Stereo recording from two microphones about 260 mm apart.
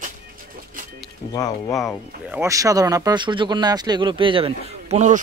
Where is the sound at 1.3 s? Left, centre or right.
Centre.